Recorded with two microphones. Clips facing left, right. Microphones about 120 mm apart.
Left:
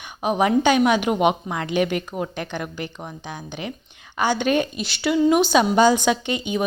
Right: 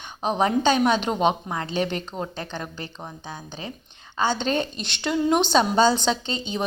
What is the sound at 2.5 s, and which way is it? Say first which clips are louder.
Speech: left 4 dB; 25° right (ahead or behind).